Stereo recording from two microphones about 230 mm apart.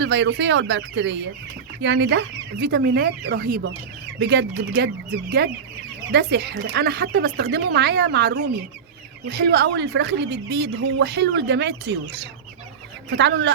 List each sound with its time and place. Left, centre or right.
0.0 s speech: right
6.1 s speech: right